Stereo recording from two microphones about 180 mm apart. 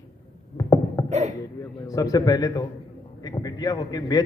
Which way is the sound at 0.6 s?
20° left (ahead or behind).